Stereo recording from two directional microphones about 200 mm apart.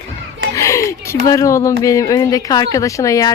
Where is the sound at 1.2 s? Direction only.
15° left (ahead or behind).